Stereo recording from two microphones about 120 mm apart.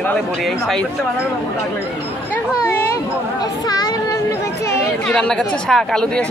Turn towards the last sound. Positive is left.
turn(degrees=5)  # may be behind; listen again after turning